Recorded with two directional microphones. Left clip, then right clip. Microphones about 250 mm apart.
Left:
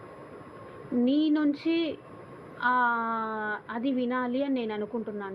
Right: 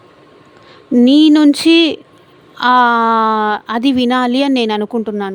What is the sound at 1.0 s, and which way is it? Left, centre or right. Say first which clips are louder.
A woman's voice: right 17 dB; right.